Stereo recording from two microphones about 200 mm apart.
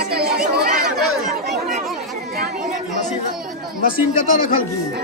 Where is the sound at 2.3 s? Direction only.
45° right (ahead or behind).